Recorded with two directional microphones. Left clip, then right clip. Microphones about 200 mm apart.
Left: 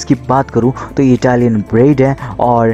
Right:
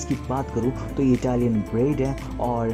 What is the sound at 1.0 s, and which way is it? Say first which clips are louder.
Speech: left 12 dB; 15° left (ahead or behind).